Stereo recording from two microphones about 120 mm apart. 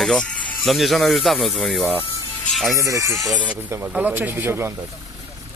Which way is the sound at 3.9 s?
15° right (ahead or behind).